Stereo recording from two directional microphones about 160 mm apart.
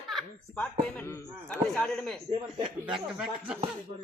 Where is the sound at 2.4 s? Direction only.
30° right (ahead or behind).